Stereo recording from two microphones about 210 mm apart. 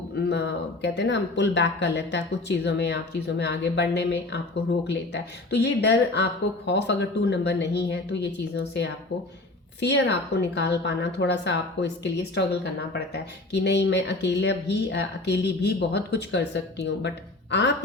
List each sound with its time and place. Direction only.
0.3 s speech: 55° left (ahead or behind)
13.5 s speech: 55° left (ahead or behind)